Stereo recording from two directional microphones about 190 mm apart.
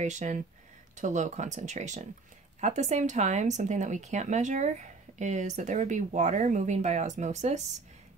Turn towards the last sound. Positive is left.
turn(degrees=-35)  # may be behind; listen again after turning